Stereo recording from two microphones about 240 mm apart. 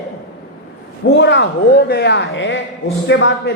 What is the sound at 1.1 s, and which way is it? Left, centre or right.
A man's voice, left.